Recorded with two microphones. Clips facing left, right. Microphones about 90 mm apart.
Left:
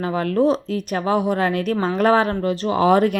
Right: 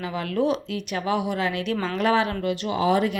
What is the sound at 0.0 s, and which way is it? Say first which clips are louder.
Speech: left 6 dB; 45° left (ahead or behind).